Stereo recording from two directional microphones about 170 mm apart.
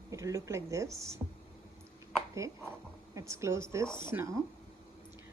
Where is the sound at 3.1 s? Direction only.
15° right (ahead or behind).